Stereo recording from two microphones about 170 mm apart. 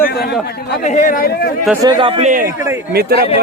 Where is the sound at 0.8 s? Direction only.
45° left (ahead or behind).